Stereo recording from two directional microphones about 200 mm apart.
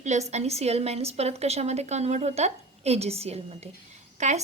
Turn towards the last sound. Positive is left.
turn(degrees=-35)  # may be behind; listen again after turning